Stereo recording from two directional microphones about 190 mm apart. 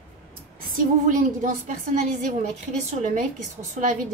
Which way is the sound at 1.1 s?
40° right (ahead or behind).